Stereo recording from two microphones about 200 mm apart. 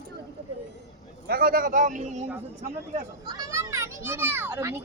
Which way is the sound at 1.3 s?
45° right (ahead or behind).